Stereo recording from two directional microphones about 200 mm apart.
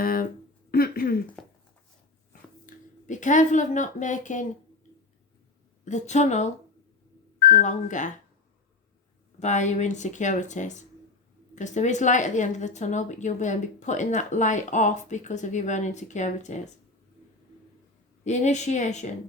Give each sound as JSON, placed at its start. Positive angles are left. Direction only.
{"t": 0.0, "sound": "a sound", "side_deg": 45}
{"t": 0.7, "sound": "speech", "side_deg": 45}
{"t": 1.4, "sound": "speech", "side_deg": 5}
{"t": 2.6, "sound": "speech", "side_deg": 40}
{"t": 5.8, "sound": "a woman's voice", "side_deg": 35}
{"t": 9.4, "sound": "a woman's voice", "side_deg": 35}
{"t": 18.3, "sound": "a woman's voice", "side_deg": 35}